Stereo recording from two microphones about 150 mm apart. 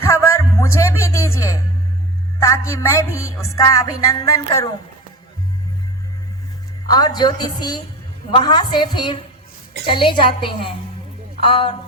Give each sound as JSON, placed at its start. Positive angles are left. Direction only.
{"t": 0.0, "sound": "music", "side_deg": 20}
{"t": 6.8, "sound": "music", "side_deg": 25}
{"t": 9.8, "sound": "a woman's voice", "side_deg": 35}
{"t": 11.4, "sound": "a woman's voice", "side_deg": 35}